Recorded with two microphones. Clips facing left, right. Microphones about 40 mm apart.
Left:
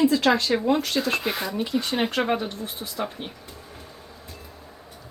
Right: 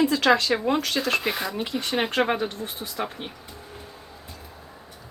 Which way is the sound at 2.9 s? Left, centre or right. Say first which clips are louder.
Left 1 dB; centre.